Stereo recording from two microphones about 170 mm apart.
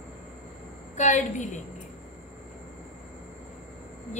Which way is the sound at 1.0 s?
45° left (ahead or behind).